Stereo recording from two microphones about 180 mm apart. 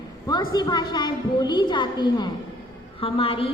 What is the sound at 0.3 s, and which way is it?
A woman's voice, 25° left (ahead or behind).